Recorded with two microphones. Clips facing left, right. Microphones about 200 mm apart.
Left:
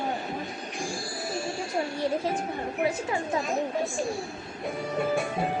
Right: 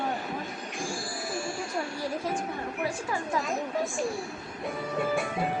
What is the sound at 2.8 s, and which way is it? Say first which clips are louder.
Speech: left 4 dB; 25° left (ahead or behind).